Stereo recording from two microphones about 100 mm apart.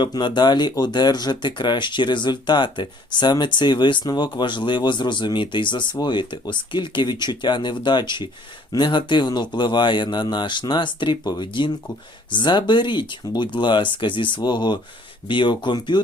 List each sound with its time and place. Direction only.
0.0 s speech: 50° left (ahead or behind)